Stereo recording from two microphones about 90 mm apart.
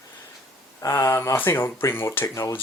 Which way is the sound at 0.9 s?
25° left (ahead or behind).